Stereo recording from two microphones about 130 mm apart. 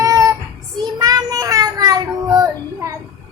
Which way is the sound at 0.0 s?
25° right (ahead or behind).